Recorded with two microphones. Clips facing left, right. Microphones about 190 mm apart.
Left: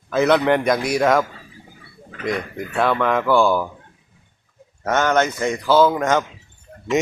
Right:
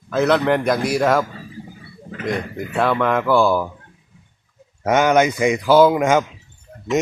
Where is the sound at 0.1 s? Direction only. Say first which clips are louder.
Even; centre (ahead or behind).